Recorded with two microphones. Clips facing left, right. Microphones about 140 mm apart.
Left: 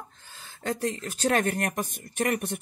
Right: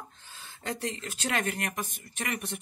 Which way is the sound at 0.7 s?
45° left (ahead or behind).